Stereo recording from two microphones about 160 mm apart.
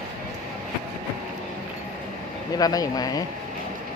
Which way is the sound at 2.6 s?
25° left (ahead or behind).